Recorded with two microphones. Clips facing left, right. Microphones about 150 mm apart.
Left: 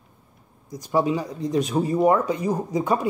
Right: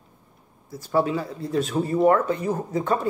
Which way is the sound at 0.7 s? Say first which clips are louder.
Left 1 dB; 15° left (ahead or behind).